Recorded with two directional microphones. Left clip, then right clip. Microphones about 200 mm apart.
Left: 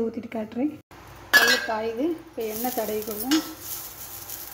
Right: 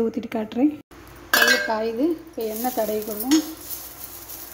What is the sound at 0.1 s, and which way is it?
Speech, 20° right (ahead or behind).